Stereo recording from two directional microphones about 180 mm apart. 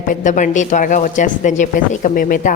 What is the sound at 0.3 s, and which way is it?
A woman's voice, 45° left (ahead or behind).